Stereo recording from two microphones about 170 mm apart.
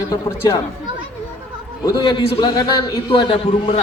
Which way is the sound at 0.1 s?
20° left (ahead or behind).